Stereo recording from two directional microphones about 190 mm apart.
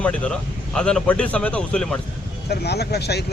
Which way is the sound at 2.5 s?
60° left (ahead or behind).